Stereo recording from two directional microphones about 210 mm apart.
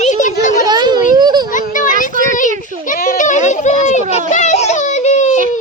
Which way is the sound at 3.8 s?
35° left (ahead or behind).